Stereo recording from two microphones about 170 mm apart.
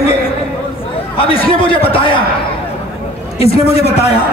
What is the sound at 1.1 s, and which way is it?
Speech, 30° left (ahead or behind).